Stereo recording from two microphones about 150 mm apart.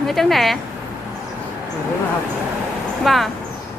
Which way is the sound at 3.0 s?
Centre (ahead or behind).